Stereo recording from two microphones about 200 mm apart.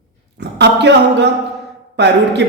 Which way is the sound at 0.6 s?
60° right (ahead or behind).